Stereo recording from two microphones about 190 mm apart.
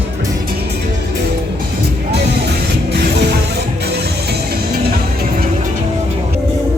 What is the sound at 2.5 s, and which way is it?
Music, 60° right (ahead or behind).